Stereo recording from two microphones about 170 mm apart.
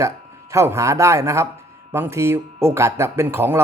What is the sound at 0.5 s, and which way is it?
A man's voice, 15° right (ahead or behind).